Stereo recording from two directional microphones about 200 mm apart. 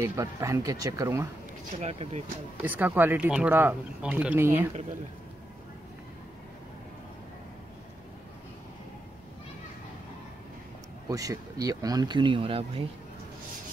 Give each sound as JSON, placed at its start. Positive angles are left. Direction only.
{"t": 0.0, "sound": "speech", "side_deg": -15}
{"t": 1.8, "sound": "speech", "side_deg": -35}
{"t": 2.6, "sound": "speech", "side_deg": -10}
{"t": 11.1, "sound": "speech", "side_deg": -15}